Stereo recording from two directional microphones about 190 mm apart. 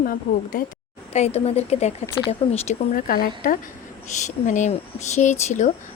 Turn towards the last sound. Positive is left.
turn(degrees=40)  # may be behind; listen again after turning